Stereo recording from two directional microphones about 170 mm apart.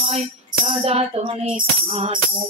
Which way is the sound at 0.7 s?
35° right (ahead or behind).